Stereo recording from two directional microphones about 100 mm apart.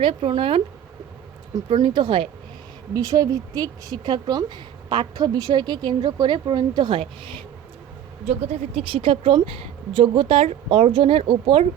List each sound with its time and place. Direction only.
0.0 s speech: 60° right (ahead or behind)
1.8 s a woman's voice: 50° right (ahead or behind)
2.9 s a woman's voice: 35° right (ahead or behind)
7.0 s speech: 55° right (ahead or behind)
8.4 s speech: 90° right; by 11.7 s 65° right (ahead or behind)